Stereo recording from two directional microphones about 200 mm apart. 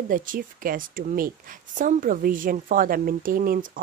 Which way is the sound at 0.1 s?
45° right (ahead or behind).